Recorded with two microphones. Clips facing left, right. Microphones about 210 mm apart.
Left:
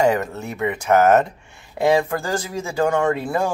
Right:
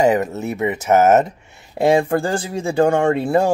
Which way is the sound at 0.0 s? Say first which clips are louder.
Right 3 dB; 20° right (ahead or behind).